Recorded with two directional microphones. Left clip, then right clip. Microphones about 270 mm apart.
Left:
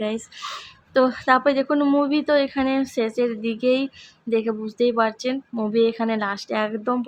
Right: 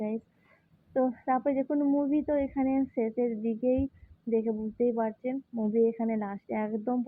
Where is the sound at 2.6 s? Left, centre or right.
Left.